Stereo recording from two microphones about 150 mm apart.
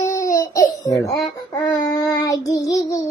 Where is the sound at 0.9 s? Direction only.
20° left (ahead or behind).